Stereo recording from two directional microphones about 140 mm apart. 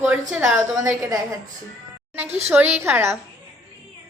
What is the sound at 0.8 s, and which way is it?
Speech, 20° right (ahead or behind).